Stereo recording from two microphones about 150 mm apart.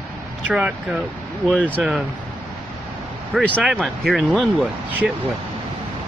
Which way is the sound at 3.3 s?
5° right (ahead or behind).